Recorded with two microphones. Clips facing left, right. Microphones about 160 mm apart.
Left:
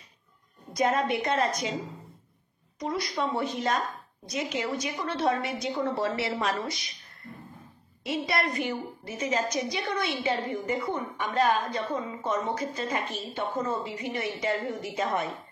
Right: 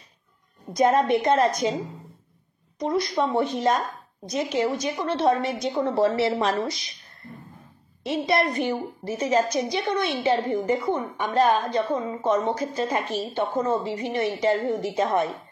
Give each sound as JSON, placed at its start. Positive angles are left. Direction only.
{"t": 0.7, "sound": "a woman's voice", "side_deg": -40}
{"t": 2.8, "sound": "a woman's voice", "side_deg": -35}
{"t": 8.0, "sound": "a woman's voice", "side_deg": -30}